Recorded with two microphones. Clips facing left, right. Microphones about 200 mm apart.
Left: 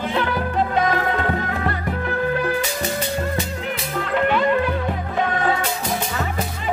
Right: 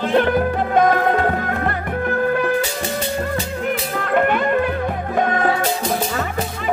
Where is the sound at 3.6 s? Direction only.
50° right (ahead or behind).